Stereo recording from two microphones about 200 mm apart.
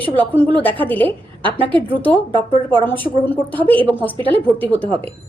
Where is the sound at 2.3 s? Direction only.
20° right (ahead or behind).